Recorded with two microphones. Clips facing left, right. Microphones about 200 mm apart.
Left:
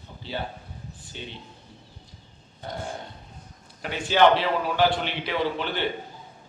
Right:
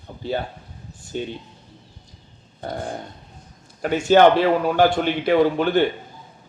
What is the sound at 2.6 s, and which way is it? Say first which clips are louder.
Speech: right 6 dB; 50° right (ahead or behind).